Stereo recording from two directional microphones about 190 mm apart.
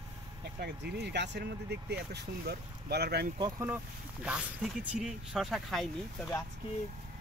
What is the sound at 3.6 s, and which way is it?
Speech, 10° right (ahead or behind).